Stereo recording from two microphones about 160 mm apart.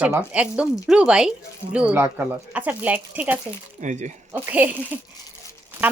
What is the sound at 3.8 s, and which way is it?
Speech, 50° right (ahead or behind).